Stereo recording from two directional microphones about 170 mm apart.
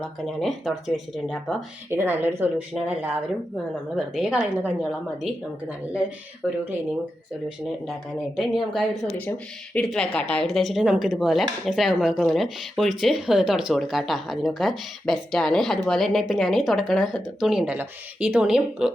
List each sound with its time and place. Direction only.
0.0 s speech: centre (ahead or behind)
1.9 s a woman's voice: 15° right (ahead or behind)
8.4 s speech: centre (ahead or behind)